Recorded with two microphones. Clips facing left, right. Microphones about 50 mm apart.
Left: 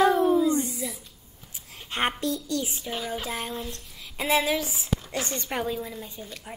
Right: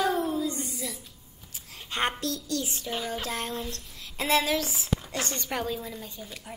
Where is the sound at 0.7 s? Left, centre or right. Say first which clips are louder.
Left 3 dB; centre.